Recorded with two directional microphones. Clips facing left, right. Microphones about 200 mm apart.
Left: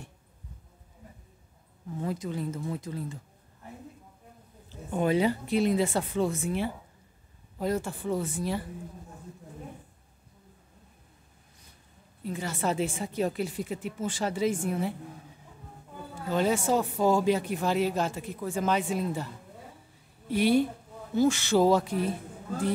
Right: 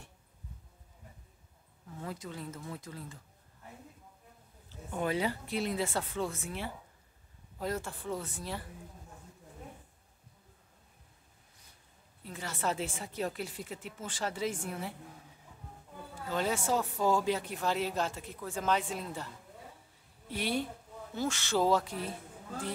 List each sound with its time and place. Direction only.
2.0 s speech: 20° left (ahead or behind)
4.9 s speech: 20° left (ahead or behind)
12.3 s speech: 15° left (ahead or behind)
16.3 s speech: 20° left (ahead or behind)
20.2 s speech: 10° left (ahead or behind)